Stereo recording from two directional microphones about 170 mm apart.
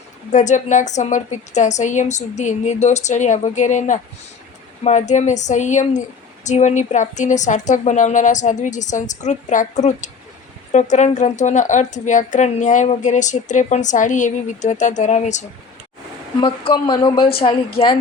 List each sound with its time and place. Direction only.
0.3 s a woman's voice: 45° left (ahead or behind)
16.8 s speech: 25° left (ahead or behind)